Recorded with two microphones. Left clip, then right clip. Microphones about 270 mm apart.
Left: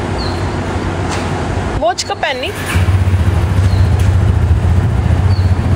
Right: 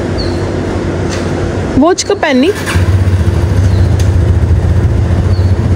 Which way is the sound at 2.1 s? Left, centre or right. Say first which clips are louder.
Right 6 dB; right.